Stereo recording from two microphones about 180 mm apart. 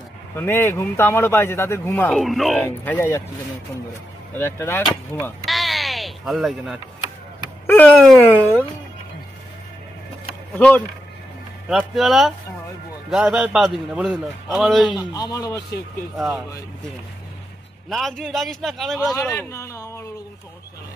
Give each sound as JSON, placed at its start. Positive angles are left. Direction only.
{"t": 0.4, "sound": "speech", "side_deg": 15}
{"t": 2.1, "sound": "a man's voice", "side_deg": 0}
{"t": 2.6, "sound": "speech", "side_deg": 10}
{"t": 4.4, "sound": "speech", "side_deg": 15}
{"t": 5.4, "sound": "bleat", "side_deg": 0}
{"t": 7.6, "sound": "speech", "side_deg": 10}
{"t": 11.7, "sound": "a man's voice", "side_deg": 0}
{"t": 14.9, "sound": "a man's voice", "side_deg": 20}
{"t": 17.8, "sound": "a man's voice", "side_deg": 0}
{"t": 19.1, "sound": "speech", "side_deg": 15}